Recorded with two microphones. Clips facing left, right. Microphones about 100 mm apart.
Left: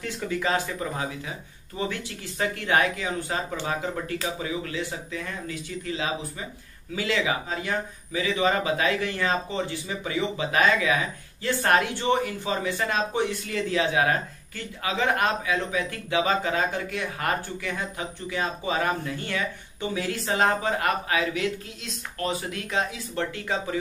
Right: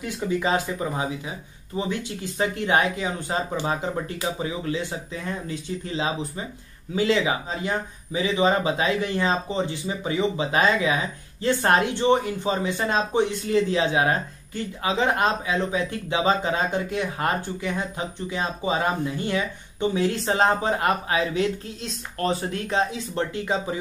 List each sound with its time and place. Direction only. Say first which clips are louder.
0.0 s speech: right 3 dB; 20° right (ahead or behind)